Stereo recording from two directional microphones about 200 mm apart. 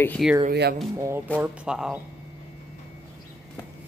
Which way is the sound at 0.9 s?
15° right (ahead or behind).